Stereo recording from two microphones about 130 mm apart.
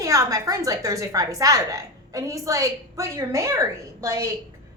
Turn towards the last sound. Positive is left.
turn(degrees=-20)  # may be behind; listen again after turning